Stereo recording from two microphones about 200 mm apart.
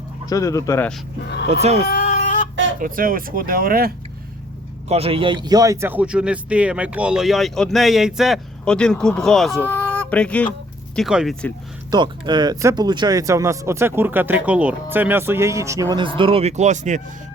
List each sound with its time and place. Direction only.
0.3 s speech: 15° left (ahead or behind)
1.9 s chicken: 45° left (ahead or behind)
2.8 s speech: 45° right (ahead or behind)
4.9 s speech: 30° right (ahead or behind); by 11.3 s centre (ahead or behind)
11.9 s speech: 20° right (ahead or behind); by 17.0 s 40° right (ahead or behind)